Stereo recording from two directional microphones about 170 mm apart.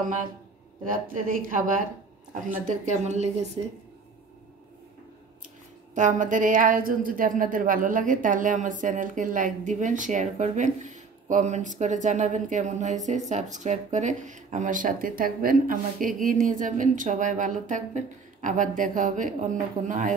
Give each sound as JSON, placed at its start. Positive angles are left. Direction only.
{"t": 0.8, "sound": "a woman's voice", "side_deg": -55}
{"t": 2.8, "sound": "a woman's voice", "side_deg": -45}
{"t": 5.9, "sound": "a woman's voice", "side_deg": -50}